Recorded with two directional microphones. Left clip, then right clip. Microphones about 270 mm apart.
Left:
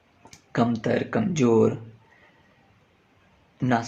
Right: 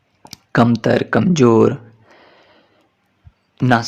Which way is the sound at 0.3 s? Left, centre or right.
Right.